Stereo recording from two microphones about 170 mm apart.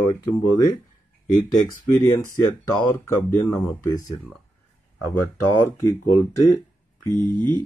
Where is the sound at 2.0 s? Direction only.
15° left (ahead or behind).